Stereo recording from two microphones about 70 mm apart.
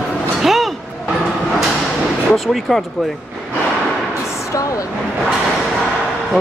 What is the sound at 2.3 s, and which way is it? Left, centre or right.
Speech, centre.